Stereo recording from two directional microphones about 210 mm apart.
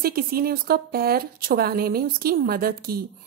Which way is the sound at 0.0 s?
45° right (ahead or behind).